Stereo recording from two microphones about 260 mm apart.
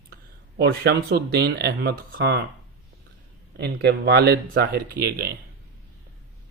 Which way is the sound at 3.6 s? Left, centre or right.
Right.